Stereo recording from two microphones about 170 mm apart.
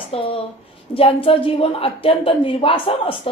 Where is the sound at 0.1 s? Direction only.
35° left (ahead or behind).